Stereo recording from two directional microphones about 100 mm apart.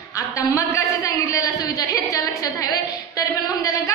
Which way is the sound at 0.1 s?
30° left (ahead or behind).